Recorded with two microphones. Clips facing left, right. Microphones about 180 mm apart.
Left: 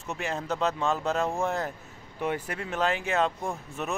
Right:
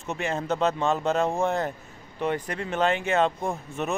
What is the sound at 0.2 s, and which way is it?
Speech, centre (ahead or behind).